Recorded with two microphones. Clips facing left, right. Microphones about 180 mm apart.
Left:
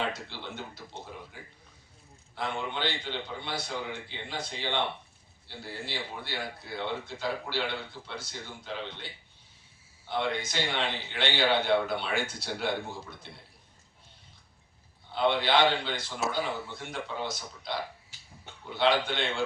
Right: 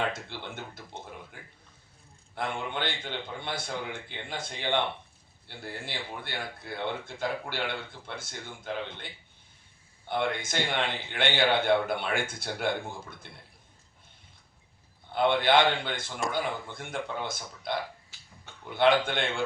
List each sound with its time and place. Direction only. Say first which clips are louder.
0.1 s speech: right 1 dB; 50° right (ahead or behind)
10.1 s speech: right 1 dB; 50° right (ahead or behind)
15.1 s speech: right 2 dB; 50° right (ahead or behind)